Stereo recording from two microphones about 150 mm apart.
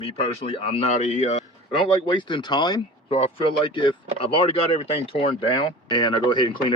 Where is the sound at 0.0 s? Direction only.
40° left (ahead or behind).